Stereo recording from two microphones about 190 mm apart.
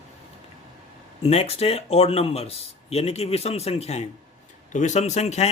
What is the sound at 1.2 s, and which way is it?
A man's voice, 35° left (ahead or behind).